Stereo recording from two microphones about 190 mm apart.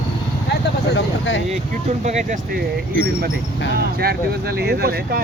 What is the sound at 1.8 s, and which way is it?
Speech, 40° right (ahead or behind).